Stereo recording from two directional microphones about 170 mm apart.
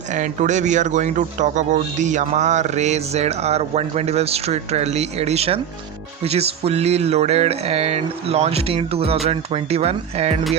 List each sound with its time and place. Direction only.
0.1 s speech: 45° right (ahead or behind)